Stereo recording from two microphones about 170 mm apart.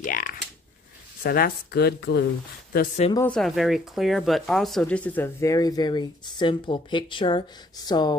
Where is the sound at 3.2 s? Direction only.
5° left (ahead or behind).